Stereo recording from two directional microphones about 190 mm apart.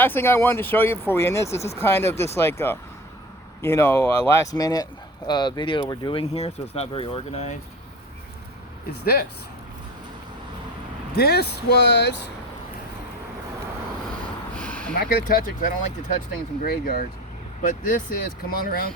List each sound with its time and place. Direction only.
0.0 s speech: 10° left (ahead or behind); by 7.5 s 30° left (ahead or behind)
11.1 s speech: 55° left (ahead or behind)
14.5 s a sound: 5° left (ahead or behind)
14.9 s speech: 50° left (ahead or behind)